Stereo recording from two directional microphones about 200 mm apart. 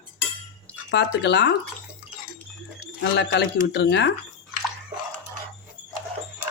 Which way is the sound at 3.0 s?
55° left (ahead or behind).